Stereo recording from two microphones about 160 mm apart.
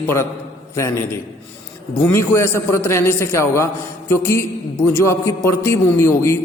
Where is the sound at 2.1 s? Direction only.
15° left (ahead or behind).